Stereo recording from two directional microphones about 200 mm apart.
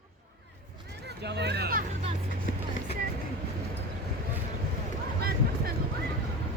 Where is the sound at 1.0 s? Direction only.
55° right (ahead or behind).